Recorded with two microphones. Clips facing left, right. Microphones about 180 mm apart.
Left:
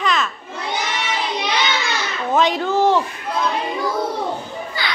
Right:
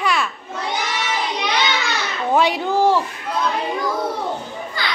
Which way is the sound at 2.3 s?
10° right (ahead or behind).